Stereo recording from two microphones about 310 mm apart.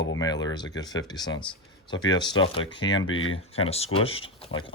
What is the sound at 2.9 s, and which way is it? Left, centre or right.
Speech, left.